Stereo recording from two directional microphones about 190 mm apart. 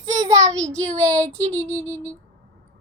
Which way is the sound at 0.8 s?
15° right (ahead or behind).